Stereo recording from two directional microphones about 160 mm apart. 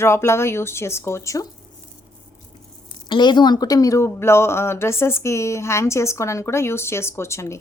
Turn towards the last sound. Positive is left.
turn(degrees=15)  # may be behind; listen again after turning